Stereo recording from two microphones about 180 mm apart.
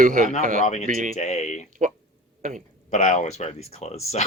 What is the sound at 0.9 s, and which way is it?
Speech, 45° right (ahead or behind).